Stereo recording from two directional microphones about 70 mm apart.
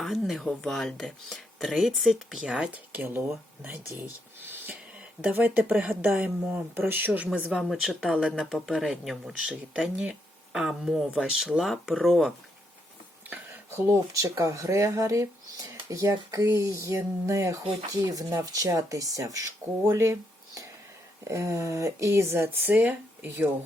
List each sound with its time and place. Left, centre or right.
0.0 s speech: centre
2.7 s speech: right
4.4 s music: right
5.3 s speech: right
7.6 s speech: centre
13.7 s speech: right
18.0 s speech: right
21.2 s speech: right